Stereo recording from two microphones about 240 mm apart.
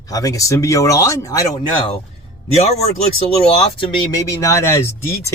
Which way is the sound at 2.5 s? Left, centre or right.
Left.